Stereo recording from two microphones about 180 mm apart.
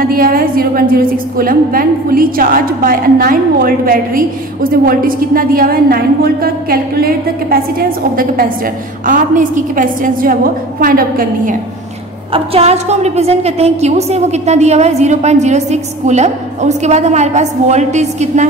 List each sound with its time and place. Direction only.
0.0 s a woman's voice: 50° right (ahead or behind)
9.0 s a woman's voice: 45° right (ahead or behind)
12.3 s a woman's voice: 35° right (ahead or behind)